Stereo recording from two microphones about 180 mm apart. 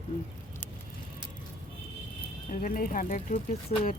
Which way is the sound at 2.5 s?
50° left (ahead or behind).